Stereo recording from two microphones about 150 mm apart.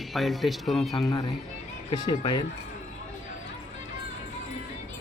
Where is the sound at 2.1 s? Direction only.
30° left (ahead or behind).